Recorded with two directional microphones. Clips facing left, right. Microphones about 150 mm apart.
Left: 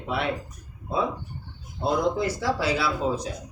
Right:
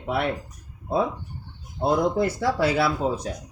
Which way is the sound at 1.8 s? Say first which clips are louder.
Right 2 dB; 55° right (ahead or behind).